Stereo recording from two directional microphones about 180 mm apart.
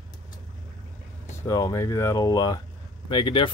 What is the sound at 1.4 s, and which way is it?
Speech, 15° left (ahead or behind).